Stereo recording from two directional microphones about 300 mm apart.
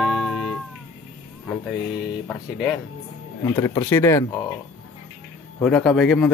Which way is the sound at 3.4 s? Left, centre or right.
Centre.